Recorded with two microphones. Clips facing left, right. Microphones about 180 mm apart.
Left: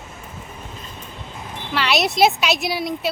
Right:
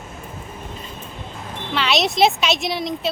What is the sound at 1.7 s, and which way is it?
Speech, centre (ahead or behind).